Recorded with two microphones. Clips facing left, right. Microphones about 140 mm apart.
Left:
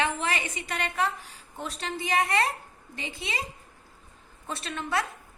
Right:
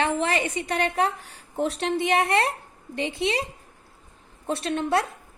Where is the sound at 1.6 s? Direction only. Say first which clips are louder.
Right 9 dB; 65° right (ahead or behind).